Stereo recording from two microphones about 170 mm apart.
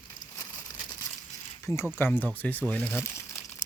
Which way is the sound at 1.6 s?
15° left (ahead or behind).